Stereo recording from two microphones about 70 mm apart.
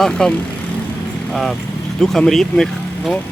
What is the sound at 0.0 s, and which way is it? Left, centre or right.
Speech, centre.